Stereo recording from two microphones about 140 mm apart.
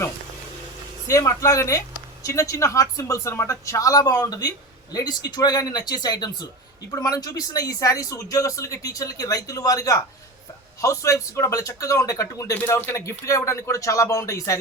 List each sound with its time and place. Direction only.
1.0 s speech: 20° left (ahead or behind)